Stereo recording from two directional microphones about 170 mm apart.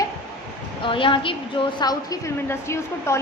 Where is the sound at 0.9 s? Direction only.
30° left (ahead or behind).